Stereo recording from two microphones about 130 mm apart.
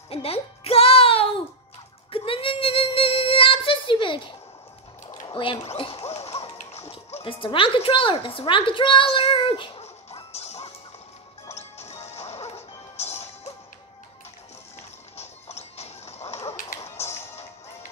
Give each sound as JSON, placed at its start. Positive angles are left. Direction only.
{"t": 0.1, "sound": "music", "side_deg": 50}
{"t": 2.0, "sound": "child singing", "side_deg": 45}
{"t": 5.2, "sound": "a sound", "side_deg": 40}
{"t": 6.7, "sound": "music", "side_deg": 55}
{"t": 11.4, "sound": "smash", "side_deg": 55}
{"t": 15.1, "sound": "a sound", "side_deg": 55}